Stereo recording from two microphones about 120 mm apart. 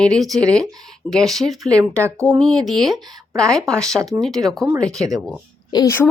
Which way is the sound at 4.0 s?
30° right (ahead or behind).